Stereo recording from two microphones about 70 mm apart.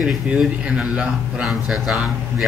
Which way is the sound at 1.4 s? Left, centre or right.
Centre.